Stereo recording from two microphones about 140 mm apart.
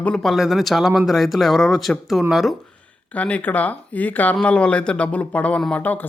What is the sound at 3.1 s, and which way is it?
Speech, 10° left (ahead or behind).